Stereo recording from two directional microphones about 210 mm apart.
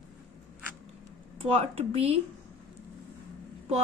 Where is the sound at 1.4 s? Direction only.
30° right (ahead or behind).